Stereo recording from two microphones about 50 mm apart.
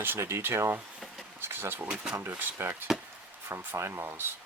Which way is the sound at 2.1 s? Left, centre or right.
Right.